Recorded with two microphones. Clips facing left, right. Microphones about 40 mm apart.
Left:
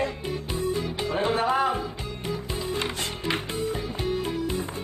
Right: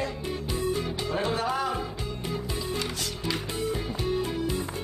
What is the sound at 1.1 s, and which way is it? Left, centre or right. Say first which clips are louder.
Speech: left 4 dB; left.